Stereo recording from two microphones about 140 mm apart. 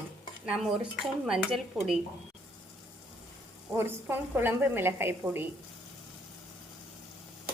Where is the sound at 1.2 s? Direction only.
5° right (ahead or behind).